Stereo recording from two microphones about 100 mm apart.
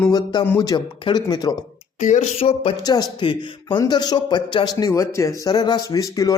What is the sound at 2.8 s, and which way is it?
Speech, 40° left (ahead or behind).